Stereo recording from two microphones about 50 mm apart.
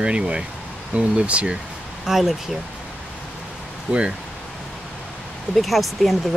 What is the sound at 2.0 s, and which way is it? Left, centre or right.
Speech, centre.